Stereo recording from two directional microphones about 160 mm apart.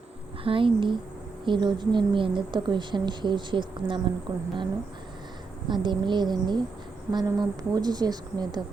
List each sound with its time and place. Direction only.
0.4 s speech: 35° right (ahead or behind)
5.6 s speech: 30° right (ahead or behind)